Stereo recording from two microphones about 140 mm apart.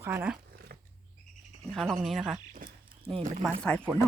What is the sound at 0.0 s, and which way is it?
Speech, 15° right (ahead or behind).